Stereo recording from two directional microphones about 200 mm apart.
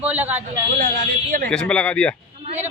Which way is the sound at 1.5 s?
5° left (ahead or behind).